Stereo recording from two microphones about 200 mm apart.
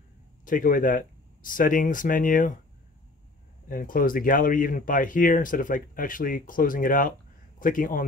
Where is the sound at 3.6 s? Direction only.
45° left (ahead or behind).